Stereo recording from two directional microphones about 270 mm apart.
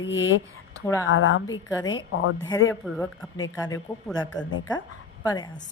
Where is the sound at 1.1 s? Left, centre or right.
Left.